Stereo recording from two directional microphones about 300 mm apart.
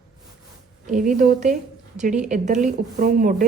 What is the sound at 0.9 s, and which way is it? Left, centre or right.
A woman's voice, right.